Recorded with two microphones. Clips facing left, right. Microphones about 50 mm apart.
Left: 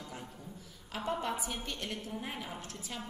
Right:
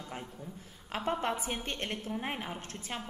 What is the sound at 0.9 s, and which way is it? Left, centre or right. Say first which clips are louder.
A woman's voice: right 3 dB; right.